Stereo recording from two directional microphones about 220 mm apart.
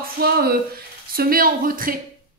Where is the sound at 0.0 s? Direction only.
45° right (ahead or behind).